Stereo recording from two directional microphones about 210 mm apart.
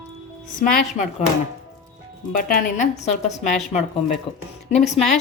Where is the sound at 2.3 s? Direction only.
40° left (ahead or behind).